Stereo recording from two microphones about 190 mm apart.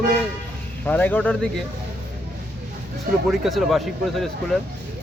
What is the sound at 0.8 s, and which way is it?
Speech, 10° left (ahead or behind).